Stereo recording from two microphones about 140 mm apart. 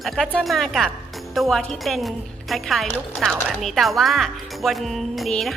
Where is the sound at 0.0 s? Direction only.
Centre (ahead or behind).